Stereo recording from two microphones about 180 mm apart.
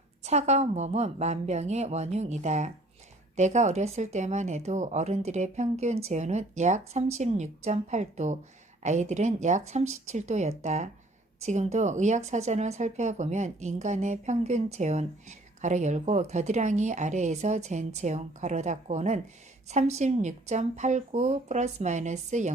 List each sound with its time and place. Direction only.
0.2 s speech: 40° right (ahead or behind)